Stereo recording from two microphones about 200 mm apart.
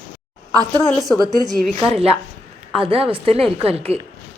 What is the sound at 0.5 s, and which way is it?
Speech, 20° right (ahead or behind).